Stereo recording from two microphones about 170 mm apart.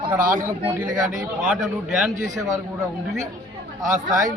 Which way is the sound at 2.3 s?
20° right (ahead or behind).